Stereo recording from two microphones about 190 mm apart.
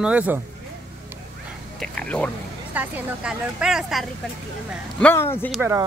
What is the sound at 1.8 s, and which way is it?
Speech, 5° left (ahead or behind).